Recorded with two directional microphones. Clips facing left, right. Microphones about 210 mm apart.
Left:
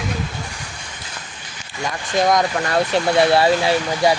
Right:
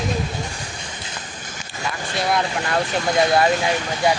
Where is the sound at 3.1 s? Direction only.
30° left (ahead or behind).